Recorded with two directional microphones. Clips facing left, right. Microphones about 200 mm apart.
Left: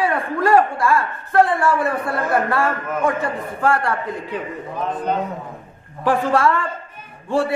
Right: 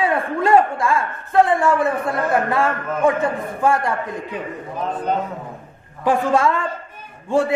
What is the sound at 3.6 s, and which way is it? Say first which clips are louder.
Speech: right 1 dB; 20° right (ahead or behind).